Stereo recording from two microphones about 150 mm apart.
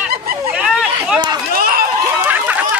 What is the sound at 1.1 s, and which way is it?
Run, 25° right (ahead or behind).